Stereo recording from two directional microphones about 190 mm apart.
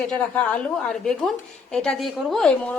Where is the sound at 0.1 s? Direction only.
5° left (ahead or behind).